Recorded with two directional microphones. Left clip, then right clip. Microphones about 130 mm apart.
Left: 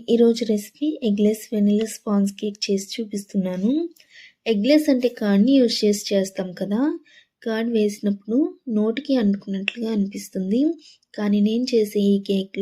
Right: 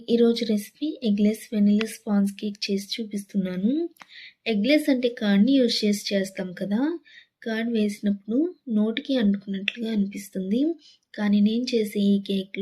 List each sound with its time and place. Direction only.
0.1 s speech: 30° left (ahead or behind)